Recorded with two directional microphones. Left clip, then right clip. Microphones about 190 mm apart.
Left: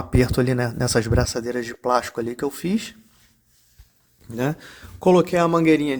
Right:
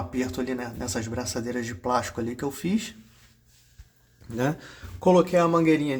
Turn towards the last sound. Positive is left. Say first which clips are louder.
# left 4 dB
turn(degrees=45)  # may be behind; listen again after turning